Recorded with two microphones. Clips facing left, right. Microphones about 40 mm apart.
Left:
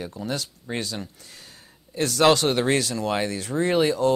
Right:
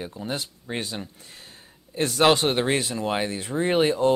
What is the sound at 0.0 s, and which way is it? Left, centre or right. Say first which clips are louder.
Speech: left 1 dB; right.